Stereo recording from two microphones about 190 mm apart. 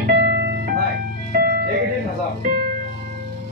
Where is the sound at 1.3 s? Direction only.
55° right (ahead or behind).